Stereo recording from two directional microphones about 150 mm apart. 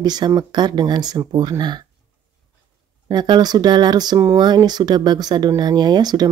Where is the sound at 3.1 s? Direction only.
30° right (ahead or behind).